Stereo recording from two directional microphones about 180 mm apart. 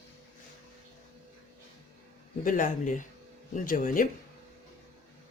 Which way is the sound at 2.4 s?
45° left (ahead or behind).